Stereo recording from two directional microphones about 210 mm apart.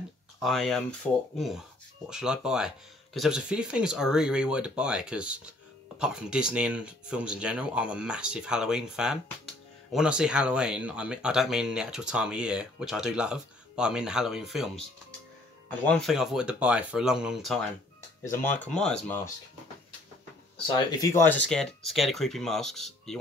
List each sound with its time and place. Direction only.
0.4 s speech: centre (ahead or behind)
18.3 s speech: 10° left (ahead or behind)
20.6 s speech: 20° left (ahead or behind); by 23.1 s centre (ahead or behind)